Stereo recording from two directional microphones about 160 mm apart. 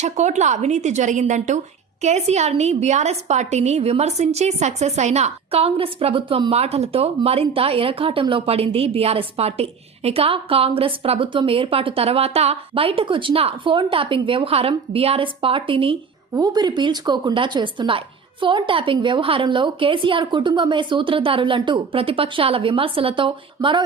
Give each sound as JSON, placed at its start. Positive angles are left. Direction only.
{"t": 0.0, "sound": "a woman's voice", "side_deg": -45}